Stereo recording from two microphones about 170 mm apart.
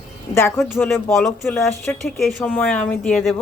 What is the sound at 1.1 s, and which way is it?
A woman's voice, centre (ahead or behind).